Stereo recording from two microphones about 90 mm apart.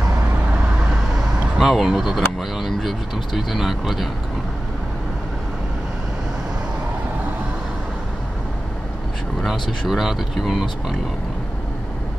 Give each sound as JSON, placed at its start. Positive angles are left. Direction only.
{"t": 0.5, "sound": "vehicle", "side_deg": -10}
{"t": 2.5, "sound": "speech", "side_deg": 0}
{"t": 9.4, "sound": "speech", "side_deg": 0}